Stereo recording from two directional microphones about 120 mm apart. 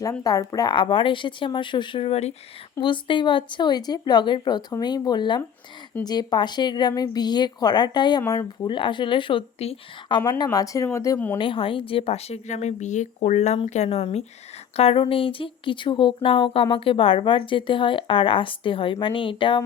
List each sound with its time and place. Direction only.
0.2 s speech: 30° left (ahead or behind)
0.7 s speech: 45° left (ahead or behind); by 2.3 s 60° left (ahead or behind)
2.8 s speech: 40° left (ahead or behind)
10.1 s speech: 40° left (ahead or behind)
11.3 s speech: 45° left (ahead or behind)